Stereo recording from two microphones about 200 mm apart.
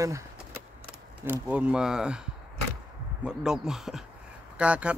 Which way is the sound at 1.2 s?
5° right (ahead or behind).